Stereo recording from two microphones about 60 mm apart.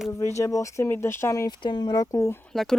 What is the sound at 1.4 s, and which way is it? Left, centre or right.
Speech, left.